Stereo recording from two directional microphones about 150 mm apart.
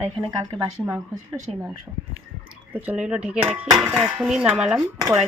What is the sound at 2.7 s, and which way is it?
Speech, 10° right (ahead or behind).